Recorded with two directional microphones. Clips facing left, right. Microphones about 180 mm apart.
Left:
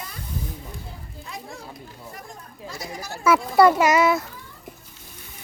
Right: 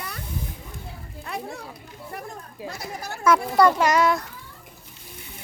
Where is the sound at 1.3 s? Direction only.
65° right (ahead or behind).